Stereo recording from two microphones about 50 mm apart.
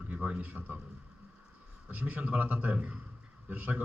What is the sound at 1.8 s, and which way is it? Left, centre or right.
A man's voice, right.